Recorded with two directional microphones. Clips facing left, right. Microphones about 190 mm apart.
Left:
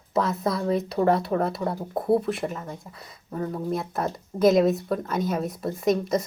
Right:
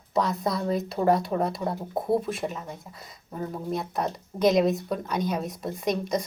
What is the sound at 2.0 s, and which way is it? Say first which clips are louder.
Speech: left 3 dB; centre (ahead or behind).